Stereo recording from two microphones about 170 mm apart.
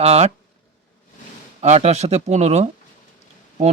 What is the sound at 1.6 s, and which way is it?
Speech, 40° right (ahead or behind).